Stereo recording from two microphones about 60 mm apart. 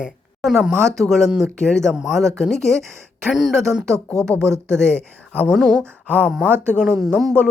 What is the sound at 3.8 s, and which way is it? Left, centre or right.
Speech, right.